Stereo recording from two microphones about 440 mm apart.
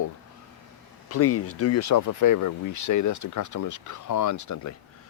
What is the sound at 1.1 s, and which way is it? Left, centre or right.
Speech, left.